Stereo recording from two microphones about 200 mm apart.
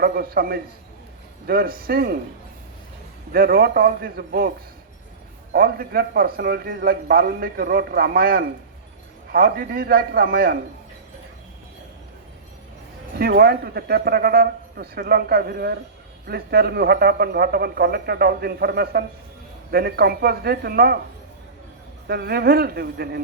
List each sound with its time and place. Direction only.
0.0 s a man's voice: 50° right (ahead or behind)
3.3 s a man's voice: 50° right (ahead or behind)
5.5 s a man's voice: 50° right (ahead or behind)
13.1 s a man's voice: 50° right (ahead or behind)
22.0 s a man's voice: 50° right (ahead or behind)